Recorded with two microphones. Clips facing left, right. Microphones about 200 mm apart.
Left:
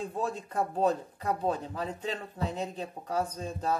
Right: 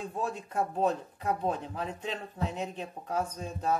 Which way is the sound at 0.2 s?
35° left (ahead or behind).